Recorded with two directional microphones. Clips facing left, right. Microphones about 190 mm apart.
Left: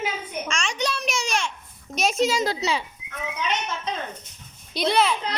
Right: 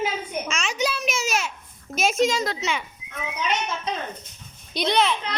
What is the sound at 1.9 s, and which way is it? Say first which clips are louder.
Speech: right 1 dB; centre (ahead or behind).